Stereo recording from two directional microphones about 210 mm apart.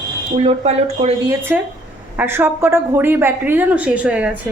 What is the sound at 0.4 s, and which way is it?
Speech, 30° right (ahead or behind).